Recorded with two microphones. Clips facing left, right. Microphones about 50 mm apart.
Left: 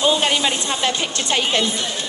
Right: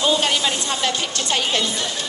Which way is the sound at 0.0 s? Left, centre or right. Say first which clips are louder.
Left 1 dB; left.